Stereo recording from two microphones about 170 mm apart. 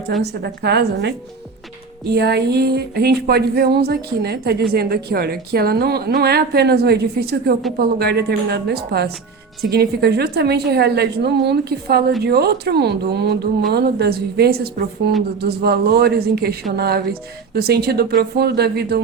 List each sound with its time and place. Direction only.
0.2 s speech: 75° right (ahead or behind)